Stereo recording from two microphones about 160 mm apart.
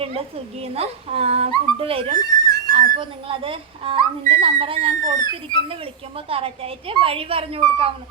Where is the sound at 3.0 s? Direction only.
35° right (ahead or behind).